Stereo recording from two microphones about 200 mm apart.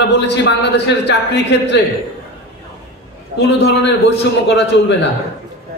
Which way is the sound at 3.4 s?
55° left (ahead or behind).